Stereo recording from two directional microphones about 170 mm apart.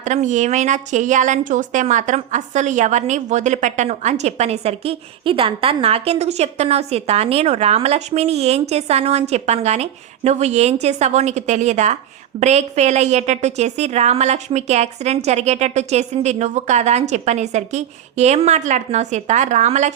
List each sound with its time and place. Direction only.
0.0 s a woman's voice: 45° right (ahead or behind)